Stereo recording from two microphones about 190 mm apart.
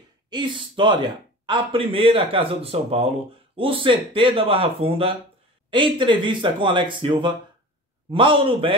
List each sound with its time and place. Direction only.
0.3 s a man's voice: 25° right (ahead or behind)